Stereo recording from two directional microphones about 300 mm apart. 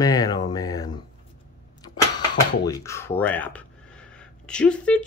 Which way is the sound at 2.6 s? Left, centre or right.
Centre.